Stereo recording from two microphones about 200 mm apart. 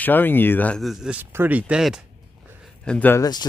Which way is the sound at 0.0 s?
10° left (ahead or behind).